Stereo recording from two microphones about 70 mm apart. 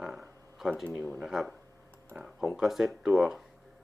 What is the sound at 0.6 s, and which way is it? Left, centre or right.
Speech, centre.